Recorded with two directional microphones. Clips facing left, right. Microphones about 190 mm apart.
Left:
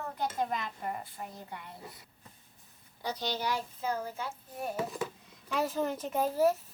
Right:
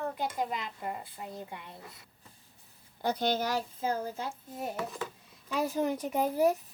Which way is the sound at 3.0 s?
55° right (ahead or behind).